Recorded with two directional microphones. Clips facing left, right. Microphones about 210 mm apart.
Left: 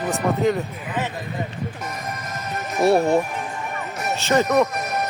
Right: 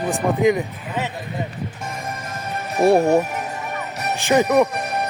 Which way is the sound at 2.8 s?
15° right (ahead or behind).